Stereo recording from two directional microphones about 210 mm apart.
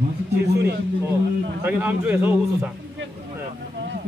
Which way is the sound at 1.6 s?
10° right (ahead or behind).